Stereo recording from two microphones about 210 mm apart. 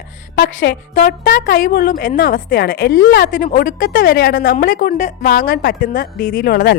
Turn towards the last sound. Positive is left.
turn(degrees=45)  # may be behind; listen again after turning